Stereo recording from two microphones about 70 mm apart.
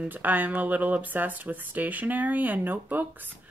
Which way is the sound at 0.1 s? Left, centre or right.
Right.